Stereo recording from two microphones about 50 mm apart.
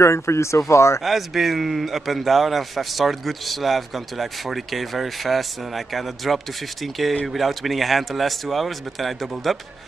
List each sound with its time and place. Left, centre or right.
0.0 s speech: left
1.0 s a man's voice: centre